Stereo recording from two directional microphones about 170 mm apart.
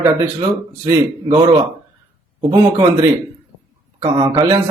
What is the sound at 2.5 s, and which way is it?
Speech, 20° right (ahead or behind).